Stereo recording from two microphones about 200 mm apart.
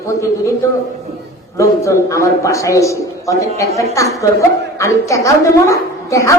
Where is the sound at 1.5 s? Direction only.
15° left (ahead or behind).